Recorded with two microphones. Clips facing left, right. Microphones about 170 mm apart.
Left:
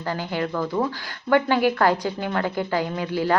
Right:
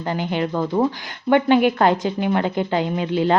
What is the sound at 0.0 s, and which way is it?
A woman's voice, 20° right (ahead or behind).